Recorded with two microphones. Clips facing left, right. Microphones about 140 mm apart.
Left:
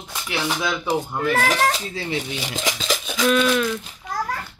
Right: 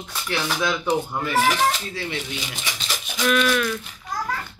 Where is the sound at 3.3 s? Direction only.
25° left (ahead or behind).